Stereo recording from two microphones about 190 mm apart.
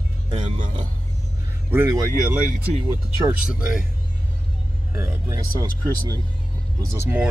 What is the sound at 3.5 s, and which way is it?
Speech, 5° right (ahead or behind).